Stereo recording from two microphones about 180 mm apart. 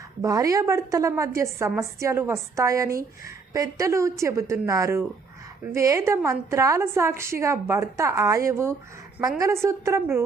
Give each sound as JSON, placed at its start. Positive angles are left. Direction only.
{"t": 0.2, "sound": "a woman's voice", "side_deg": -20}